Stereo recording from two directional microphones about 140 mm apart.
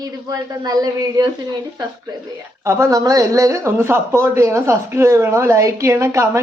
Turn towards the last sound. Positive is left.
turn(degrees=-20)  # may be behind; listen again after turning